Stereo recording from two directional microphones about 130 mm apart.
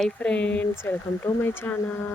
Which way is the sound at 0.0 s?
10° left (ahead or behind).